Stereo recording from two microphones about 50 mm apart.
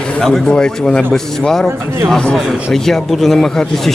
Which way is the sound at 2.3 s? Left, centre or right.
Centre.